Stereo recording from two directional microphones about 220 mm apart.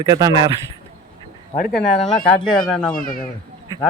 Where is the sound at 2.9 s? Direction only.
40° left (ahead or behind).